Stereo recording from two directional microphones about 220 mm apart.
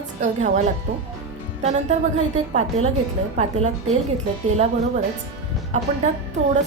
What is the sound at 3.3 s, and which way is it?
A woman's voice, 30° right (ahead or behind).